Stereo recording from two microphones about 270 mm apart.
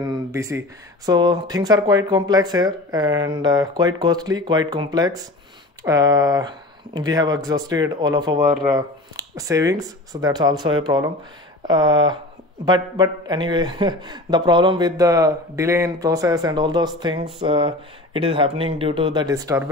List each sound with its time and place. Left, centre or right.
0.0 s a man's voice: centre